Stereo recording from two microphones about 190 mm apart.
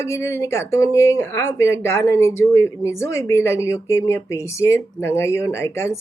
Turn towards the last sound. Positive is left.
turn(degrees=15)  # may be behind; listen again after turning